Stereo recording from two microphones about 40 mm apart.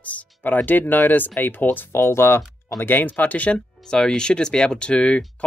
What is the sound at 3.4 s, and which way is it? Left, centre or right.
Speech, left.